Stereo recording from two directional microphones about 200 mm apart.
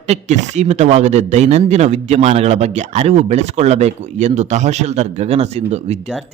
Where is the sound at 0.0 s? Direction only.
35° right (ahead or behind).